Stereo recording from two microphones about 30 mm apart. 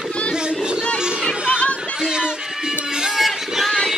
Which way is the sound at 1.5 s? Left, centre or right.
Left.